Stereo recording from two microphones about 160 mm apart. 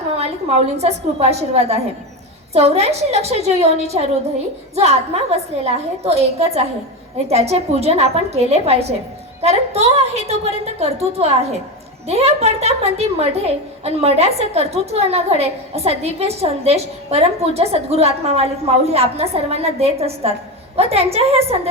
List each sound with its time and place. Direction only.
0.2 s a woman's voice: 40° right (ahead or behind)
4.7 s a woman's voice: 40° right (ahead or behind)